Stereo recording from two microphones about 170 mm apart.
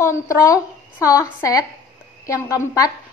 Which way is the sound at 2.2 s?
20° left (ahead or behind).